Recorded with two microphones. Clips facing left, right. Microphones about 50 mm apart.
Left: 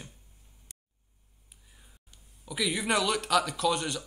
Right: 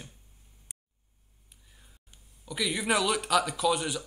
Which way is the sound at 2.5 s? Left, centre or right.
Centre.